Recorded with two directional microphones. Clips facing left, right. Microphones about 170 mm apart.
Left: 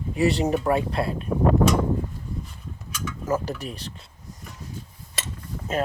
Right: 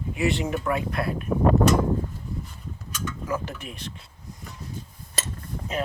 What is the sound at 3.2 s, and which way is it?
Speech, 40° left (ahead or behind).